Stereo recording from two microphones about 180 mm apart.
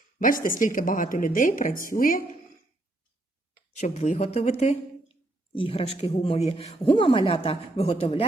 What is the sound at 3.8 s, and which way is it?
A woman's voice, 40° left (ahead or behind).